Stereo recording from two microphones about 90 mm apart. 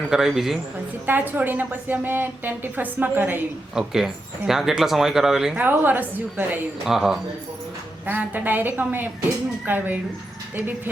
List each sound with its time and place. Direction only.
0.1 s speech: 5° right (ahead or behind)
1.0 s a woman's voice: 20° right (ahead or behind)
3.8 s speech: 5° right (ahead or behind)
5.5 s a woman's voice: 20° right (ahead or behind)
6.8 s speech: 5° right (ahead or behind)
8.0 s a woman's voice: 20° right (ahead or behind)